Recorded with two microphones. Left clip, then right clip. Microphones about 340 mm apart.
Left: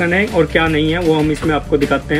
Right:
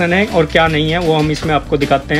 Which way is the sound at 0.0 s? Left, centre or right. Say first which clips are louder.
Right 1 dB; right.